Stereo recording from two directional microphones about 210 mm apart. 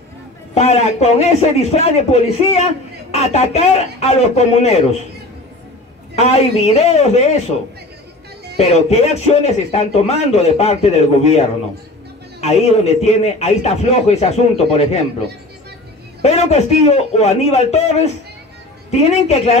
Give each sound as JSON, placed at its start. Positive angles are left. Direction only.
{"t": 0.6, "sound": "speech", "side_deg": 30}
{"t": 6.1, "sound": "speech", "side_deg": 30}
{"t": 8.5, "sound": "speech", "side_deg": 30}
{"t": 16.2, "sound": "speech", "side_deg": 30}